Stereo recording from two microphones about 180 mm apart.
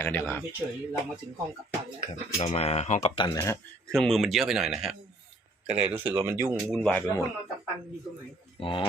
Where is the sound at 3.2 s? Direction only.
20° left (ahead or behind).